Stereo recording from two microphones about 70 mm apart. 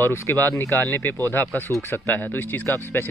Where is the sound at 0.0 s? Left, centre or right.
Left.